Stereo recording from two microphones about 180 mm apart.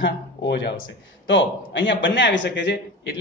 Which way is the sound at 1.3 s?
90° left.